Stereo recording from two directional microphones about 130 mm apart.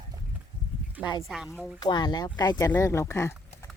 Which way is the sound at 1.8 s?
35° left (ahead or behind).